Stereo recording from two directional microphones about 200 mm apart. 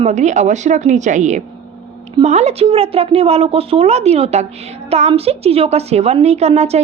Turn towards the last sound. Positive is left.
turn(degrees=-30)  # may be behind; listen again after turning